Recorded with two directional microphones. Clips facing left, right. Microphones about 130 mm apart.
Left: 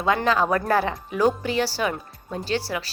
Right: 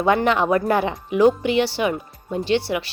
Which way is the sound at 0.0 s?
25° right (ahead or behind).